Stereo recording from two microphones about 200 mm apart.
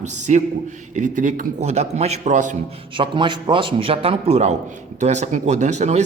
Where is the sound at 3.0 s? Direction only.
25° right (ahead or behind).